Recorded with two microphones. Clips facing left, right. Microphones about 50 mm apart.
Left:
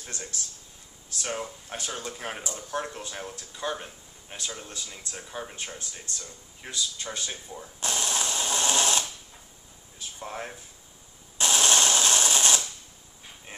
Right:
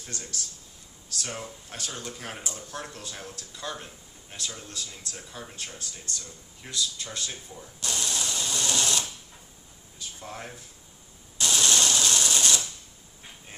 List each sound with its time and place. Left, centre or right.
0.0 s a man's voice: left
9.9 s a sound: left
11.3 s sewing machine: left